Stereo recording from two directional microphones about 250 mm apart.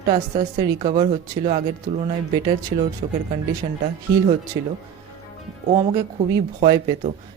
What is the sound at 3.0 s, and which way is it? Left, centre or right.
Speech, right.